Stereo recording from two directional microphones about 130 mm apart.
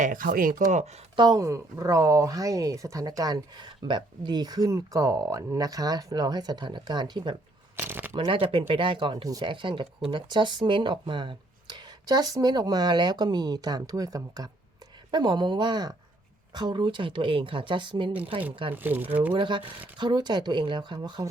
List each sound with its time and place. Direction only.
0.0 s speech: 90° right
1.1 s speech: 30° right (ahead or behind)
7.8 s shuffling cards: 15° right (ahead or behind)
8.1 s speech: 40° right (ahead or behind)
18.7 s speech: 15° right (ahead or behind)
19.3 s speech: 40° right (ahead or behind)